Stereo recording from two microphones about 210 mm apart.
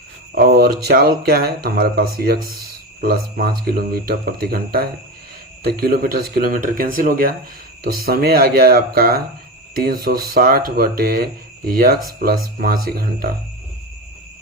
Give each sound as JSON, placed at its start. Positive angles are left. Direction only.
{"t": 0.3, "sound": "speech", "side_deg": -45}